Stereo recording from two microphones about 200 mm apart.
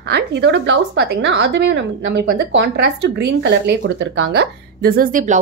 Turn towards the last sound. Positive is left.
turn(degrees=-40)  # may be behind; listen again after turning